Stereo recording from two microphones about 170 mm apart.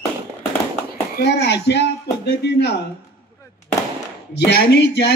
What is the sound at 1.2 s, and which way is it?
A man's voice, 80° left.